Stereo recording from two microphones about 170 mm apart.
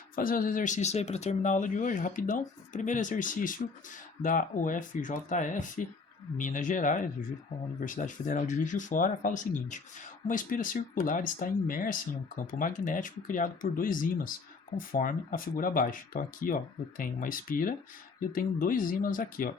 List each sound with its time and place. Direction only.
0.2 s speech: 55° left (ahead or behind)